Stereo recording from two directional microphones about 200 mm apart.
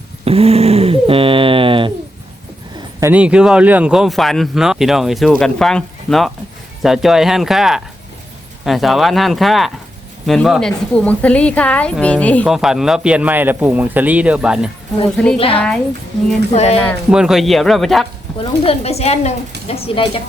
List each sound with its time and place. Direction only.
0.3 s dog: 30° right (ahead or behind)
2.7 s a man's voice: 10° right (ahead or behind)
15.4 s a woman's voice: 30° left (ahead or behind)
17.1 s speech: 5° right (ahead or behind)
18.6 s a woman's voice: 30° left (ahead or behind)